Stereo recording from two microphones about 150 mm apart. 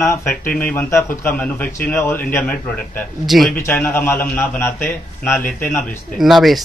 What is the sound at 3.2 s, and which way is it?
Speech, centre (ahead or behind).